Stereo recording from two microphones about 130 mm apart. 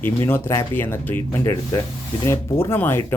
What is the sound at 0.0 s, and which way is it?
Speech, 15° left (ahead or behind).